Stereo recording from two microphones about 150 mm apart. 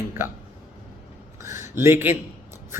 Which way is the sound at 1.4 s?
20° right (ahead or behind).